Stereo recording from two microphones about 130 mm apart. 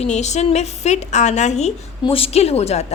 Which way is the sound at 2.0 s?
45° left (ahead or behind).